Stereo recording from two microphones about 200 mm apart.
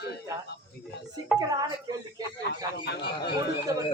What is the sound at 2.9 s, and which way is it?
Speech, 55° left (ahead or behind).